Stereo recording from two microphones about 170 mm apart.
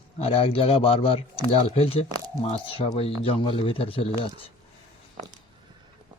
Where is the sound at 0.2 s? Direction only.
35° left (ahead or behind).